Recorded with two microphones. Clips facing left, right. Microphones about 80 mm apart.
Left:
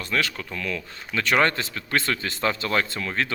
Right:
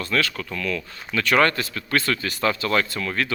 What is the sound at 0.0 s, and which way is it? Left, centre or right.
Speech, left.